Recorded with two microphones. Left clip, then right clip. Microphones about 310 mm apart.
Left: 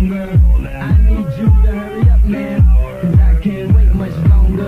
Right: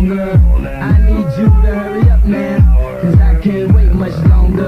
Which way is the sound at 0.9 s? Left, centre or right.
Right.